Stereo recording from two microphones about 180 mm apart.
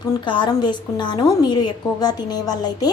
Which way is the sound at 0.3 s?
25° left (ahead or behind).